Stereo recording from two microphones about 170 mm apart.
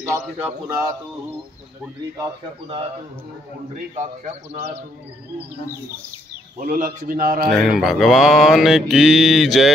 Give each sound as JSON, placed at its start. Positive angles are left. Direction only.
{"t": 0.0, "sound": "speech", "side_deg": -15}
{"t": 3.9, "sound": "speech", "side_deg": -40}
{"t": 6.6, "sound": "a man's voice", "side_deg": -50}
{"t": 7.5, "sound": "mantra", "side_deg": 0}